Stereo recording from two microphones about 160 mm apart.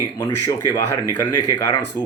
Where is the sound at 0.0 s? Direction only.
15° left (ahead or behind).